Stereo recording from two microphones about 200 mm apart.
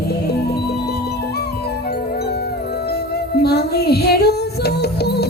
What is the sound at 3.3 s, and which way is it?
Music, 55° left (ahead or behind).